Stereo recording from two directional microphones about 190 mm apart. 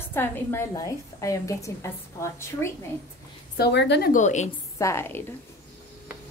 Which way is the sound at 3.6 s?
65° left (ahead or behind).